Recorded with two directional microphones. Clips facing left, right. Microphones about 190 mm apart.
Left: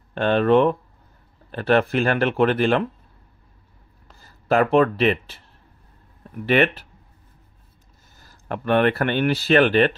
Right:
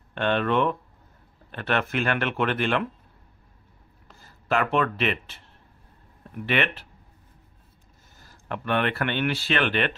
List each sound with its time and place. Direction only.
0.1 s speech: 35° left (ahead or behind)
4.5 s speech: 35° left (ahead or behind)
6.4 s speech: 40° left (ahead or behind)
8.5 s speech: 40° left (ahead or behind)